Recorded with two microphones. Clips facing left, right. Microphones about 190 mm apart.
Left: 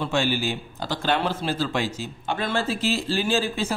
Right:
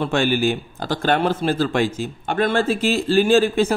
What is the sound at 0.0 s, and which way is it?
A man's voice, 55° right (ahead or behind).